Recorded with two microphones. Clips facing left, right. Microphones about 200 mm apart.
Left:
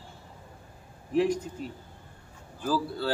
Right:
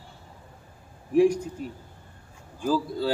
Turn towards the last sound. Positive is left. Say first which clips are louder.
# right 3 dB
turn(degrees=-10)  # may be behind; listen again after turning